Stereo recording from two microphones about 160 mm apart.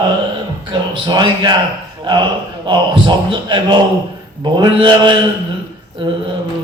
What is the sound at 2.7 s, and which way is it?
A man's voice, 30° right (ahead or behind).